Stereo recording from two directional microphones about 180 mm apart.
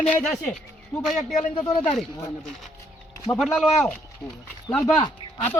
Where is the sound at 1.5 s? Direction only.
25° left (ahead or behind).